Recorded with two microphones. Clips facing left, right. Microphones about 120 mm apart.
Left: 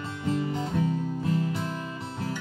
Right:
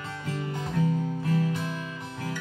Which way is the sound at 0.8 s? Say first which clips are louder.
Right 1 dB; 20° left (ahead or behind).